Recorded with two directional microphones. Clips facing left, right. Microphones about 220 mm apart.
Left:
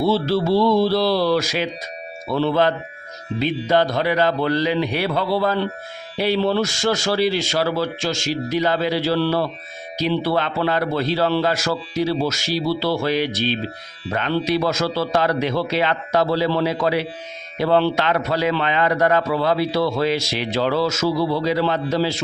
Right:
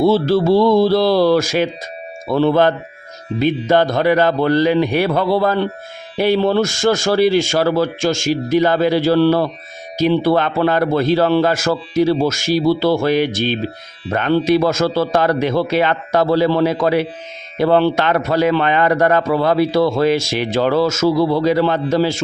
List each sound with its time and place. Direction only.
0.0 s a man's voice: 50° right (ahead or behind)